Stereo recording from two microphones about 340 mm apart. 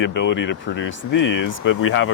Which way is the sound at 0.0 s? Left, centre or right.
Left.